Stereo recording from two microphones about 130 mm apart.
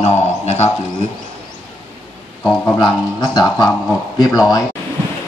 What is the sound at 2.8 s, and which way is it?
Speech, 35° left (ahead or behind).